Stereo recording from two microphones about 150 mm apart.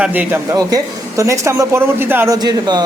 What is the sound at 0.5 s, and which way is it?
A man's voice, 20° right (ahead or behind).